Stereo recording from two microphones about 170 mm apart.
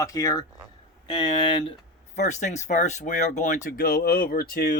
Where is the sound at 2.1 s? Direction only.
45° left (ahead or behind).